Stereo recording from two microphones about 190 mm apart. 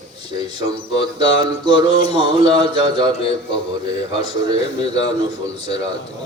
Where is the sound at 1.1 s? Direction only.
25° right (ahead or behind).